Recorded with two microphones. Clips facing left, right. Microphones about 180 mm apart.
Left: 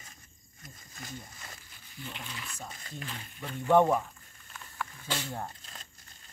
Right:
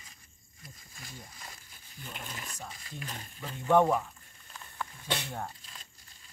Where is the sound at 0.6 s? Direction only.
45° left (ahead or behind).